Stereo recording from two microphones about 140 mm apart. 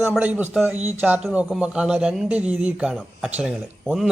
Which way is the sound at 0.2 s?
10° right (ahead or behind).